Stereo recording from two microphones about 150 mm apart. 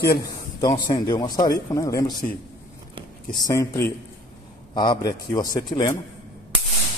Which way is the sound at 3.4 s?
20° left (ahead or behind).